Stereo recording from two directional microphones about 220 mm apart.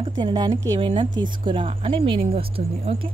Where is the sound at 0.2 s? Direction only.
20° right (ahead or behind).